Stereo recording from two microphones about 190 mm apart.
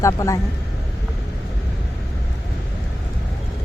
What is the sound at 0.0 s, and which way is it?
Speech, 15° left (ahead or behind).